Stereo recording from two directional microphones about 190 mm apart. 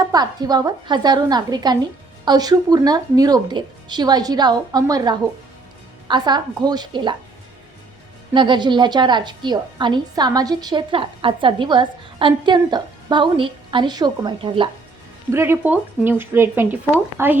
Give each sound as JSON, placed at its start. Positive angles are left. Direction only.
{"t": 0.0, "sound": "a woman's voice", "side_deg": -20}
{"t": 8.3, "sound": "a woman's voice", "side_deg": -25}
{"t": 15.3, "sound": "speech", "side_deg": -15}